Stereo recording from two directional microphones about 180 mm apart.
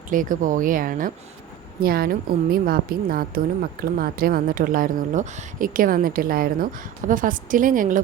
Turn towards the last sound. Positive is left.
turn(degrees=-50)  # may be behind; listen again after turning